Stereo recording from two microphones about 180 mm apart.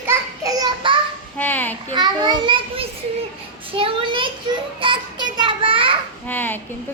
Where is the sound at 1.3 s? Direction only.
10° left (ahead or behind).